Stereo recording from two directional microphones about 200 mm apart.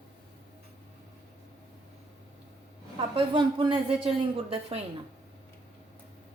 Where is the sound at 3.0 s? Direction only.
25° right (ahead or behind).